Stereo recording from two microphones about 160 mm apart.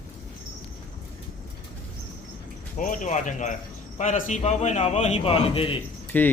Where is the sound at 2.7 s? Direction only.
55° left (ahead or behind); by 5.8 s 35° left (ahead or behind).